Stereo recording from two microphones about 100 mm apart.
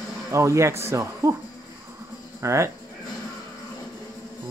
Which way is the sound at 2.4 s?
30° right (ahead or behind).